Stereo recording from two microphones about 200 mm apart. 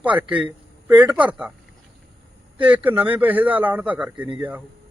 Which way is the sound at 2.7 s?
10° right (ahead or behind).